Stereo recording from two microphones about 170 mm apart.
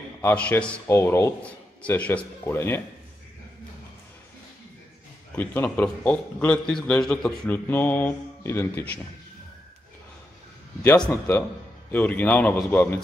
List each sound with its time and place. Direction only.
0.2 s a man's voice: 10° left (ahead or behind)
5.3 s a man's voice: 10° left (ahead or behind)
10.8 s a man's voice: 10° left (ahead or behind)